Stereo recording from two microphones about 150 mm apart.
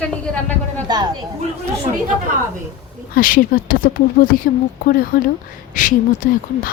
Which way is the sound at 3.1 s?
70° left (ahead or behind).